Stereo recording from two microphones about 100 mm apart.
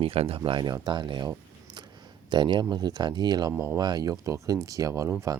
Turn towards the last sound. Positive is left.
turn(degrees=-30)  # may be behind; listen again after turning